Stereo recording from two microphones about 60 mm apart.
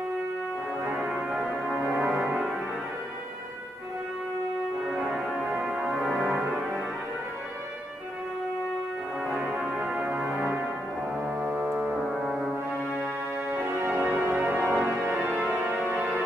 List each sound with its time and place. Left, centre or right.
0.8 s music: right
5.6 s music: centre
9.8 s music: centre
11.2 s keyboard: right
13.5 s music: right